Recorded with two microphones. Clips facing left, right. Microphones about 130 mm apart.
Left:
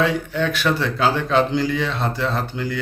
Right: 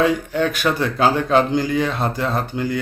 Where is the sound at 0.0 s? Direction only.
45° right (ahead or behind).